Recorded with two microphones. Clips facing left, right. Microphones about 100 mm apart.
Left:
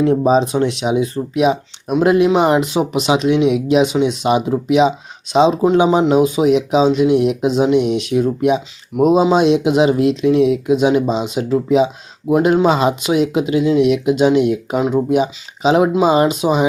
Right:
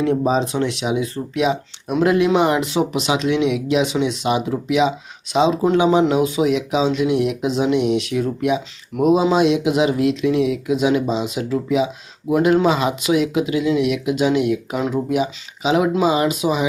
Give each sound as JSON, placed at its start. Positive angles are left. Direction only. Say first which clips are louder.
{"t": 0.2, "sound": "speech", "louder": "left 5 dB", "side_deg": 20}